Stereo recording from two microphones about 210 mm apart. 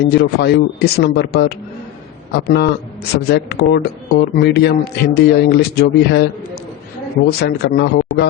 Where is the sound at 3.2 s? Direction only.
50° left (ahead or behind).